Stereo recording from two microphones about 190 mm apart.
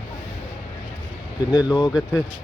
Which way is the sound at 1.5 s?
20° left (ahead or behind).